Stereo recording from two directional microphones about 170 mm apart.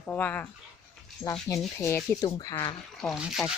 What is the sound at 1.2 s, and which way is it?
Speech, 20° left (ahead or behind).